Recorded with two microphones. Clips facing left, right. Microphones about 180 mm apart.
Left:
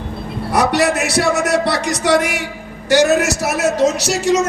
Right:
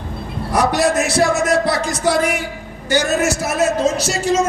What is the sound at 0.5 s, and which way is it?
A man's voice, 70° left (ahead or behind).